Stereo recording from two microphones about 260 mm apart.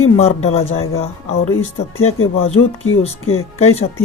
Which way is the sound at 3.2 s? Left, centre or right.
Left.